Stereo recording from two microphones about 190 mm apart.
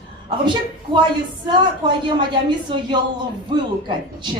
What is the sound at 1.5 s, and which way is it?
A woman's voice, 25° right (ahead or behind).